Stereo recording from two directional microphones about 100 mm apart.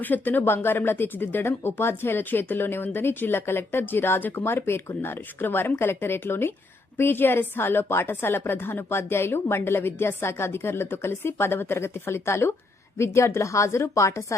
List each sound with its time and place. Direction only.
0.0 s speech: 20° left (ahead or behind)